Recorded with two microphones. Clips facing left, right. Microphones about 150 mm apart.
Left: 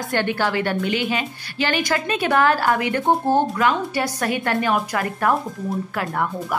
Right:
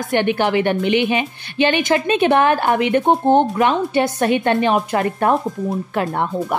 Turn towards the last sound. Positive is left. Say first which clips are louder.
# right 4 dB
turn(degrees=-25)  # may be behind; listen again after turning